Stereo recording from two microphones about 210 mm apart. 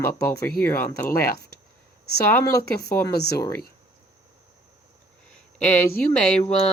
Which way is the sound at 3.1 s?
50° left (ahead or behind).